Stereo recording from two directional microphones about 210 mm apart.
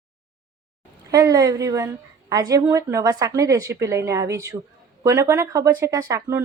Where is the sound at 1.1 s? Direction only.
15° right (ahead or behind).